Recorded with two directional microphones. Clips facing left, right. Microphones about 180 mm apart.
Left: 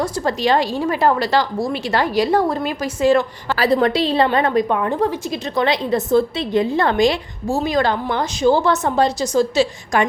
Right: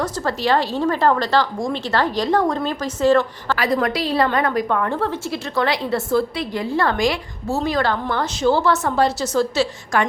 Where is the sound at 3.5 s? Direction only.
30° left (ahead or behind).